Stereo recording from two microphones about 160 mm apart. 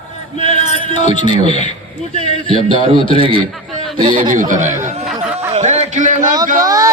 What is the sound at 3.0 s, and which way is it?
Speech, 35° left (ahead or behind).